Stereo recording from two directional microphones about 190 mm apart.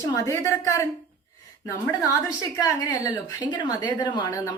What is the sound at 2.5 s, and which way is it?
A woman's voice, 20° left (ahead or behind).